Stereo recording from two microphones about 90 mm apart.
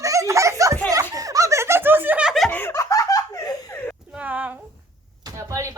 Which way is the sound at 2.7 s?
40° left (ahead or behind).